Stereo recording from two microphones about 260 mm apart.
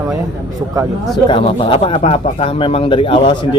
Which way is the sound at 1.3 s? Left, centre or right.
Centre.